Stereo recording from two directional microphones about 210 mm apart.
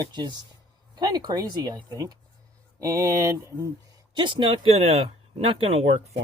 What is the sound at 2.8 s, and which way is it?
Speech, 15° right (ahead or behind).